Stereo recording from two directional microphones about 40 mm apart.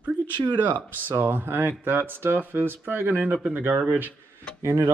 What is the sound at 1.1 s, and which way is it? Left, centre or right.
Speech, right.